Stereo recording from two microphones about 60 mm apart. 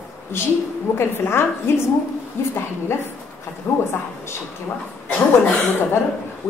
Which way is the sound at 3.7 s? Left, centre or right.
Left.